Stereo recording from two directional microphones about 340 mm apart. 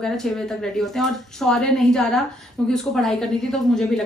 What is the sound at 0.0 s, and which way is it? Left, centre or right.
A woman's voice, centre.